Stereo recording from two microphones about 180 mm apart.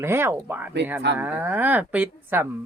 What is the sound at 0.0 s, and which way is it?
A woman's voice, 15° right (ahead or behind).